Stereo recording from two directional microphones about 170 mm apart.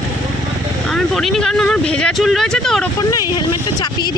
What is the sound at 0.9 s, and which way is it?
Speech, centre (ahead or behind).